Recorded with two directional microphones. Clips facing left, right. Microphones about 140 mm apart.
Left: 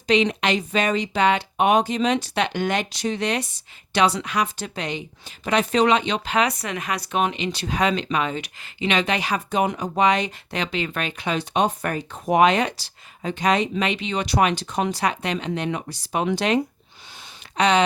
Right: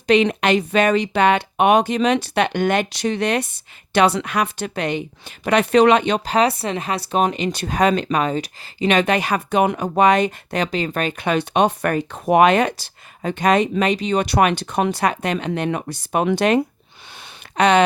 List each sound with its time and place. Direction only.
0.1 s speech: 55° right (ahead or behind)
17.6 s speech: 55° right (ahead or behind)